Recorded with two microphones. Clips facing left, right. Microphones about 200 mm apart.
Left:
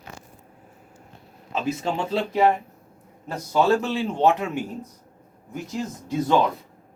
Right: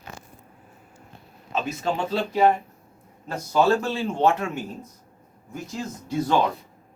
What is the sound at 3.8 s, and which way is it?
Speech, 20° left (ahead or behind).